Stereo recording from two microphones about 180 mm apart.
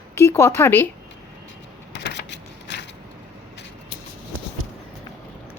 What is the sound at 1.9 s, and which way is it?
Typewriter, 80° left.